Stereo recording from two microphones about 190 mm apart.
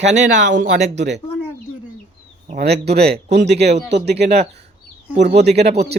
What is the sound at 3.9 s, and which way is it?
Speech, 60° right (ahead or behind).